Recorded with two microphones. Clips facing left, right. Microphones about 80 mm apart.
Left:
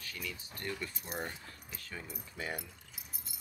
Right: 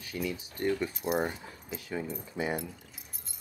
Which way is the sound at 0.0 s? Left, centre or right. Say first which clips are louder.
Right 9 dB; right.